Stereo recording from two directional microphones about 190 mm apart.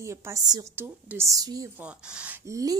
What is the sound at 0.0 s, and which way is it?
A woman's voice, 15° right (ahead or behind).